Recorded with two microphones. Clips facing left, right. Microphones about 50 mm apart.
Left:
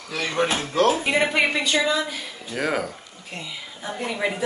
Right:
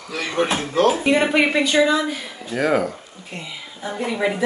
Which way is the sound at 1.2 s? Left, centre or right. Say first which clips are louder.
Right 4 dB; centre.